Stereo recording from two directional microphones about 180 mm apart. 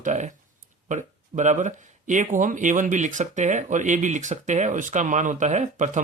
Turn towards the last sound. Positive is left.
turn(degrees=-40)  # may be behind; listen again after turning